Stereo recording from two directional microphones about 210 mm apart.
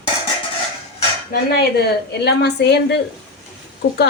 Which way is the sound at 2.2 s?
50° left (ahead or behind).